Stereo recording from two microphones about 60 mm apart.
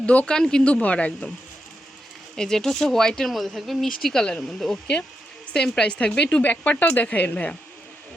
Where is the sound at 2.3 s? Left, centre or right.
Centre.